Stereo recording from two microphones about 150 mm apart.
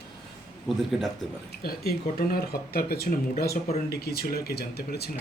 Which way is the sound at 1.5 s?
85° left.